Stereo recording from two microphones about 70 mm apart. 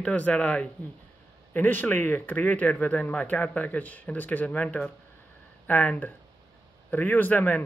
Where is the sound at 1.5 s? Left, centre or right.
Left.